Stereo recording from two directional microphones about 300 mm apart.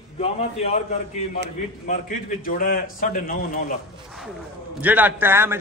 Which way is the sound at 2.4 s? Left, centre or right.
Left.